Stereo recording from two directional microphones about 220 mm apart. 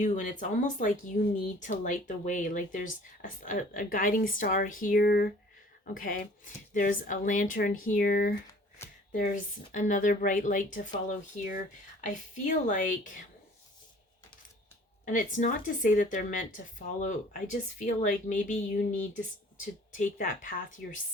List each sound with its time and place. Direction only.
0.0 s speech: 35° left (ahead or behind)
8.8 s shuffling cards: 10° left (ahead or behind)
9.1 s speech: 35° left (ahead or behind)
15.0 s speech: 35° left (ahead or behind)